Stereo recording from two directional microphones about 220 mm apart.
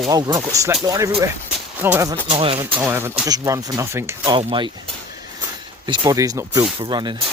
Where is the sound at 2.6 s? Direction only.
10° right (ahead or behind).